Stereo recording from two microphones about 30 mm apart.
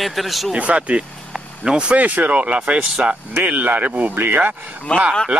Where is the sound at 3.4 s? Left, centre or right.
Right.